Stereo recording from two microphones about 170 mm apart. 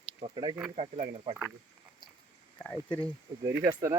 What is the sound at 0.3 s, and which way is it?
Speech, 25° right (ahead or behind).